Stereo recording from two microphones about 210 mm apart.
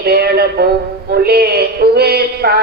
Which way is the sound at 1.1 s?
50° right (ahead or behind).